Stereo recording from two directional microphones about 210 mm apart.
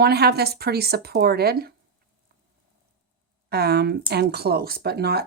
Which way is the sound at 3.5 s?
50° right (ahead or behind).